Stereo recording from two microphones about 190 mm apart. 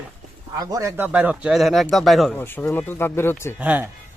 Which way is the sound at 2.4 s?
10° left (ahead or behind).